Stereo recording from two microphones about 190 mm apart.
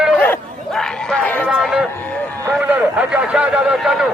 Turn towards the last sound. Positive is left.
turn(degrees=0)  # may be behind; listen again after turning